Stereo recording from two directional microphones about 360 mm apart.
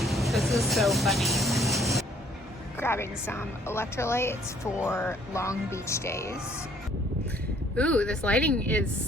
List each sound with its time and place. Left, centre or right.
0.0 s vehicle: centre
2.7 s a woman's voice: centre
7.8 s speech: centre